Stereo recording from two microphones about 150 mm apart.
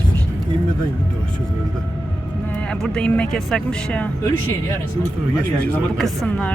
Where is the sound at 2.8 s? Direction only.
5° left (ahead or behind).